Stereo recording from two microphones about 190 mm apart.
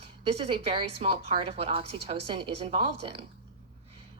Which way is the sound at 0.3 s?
30° right (ahead or behind).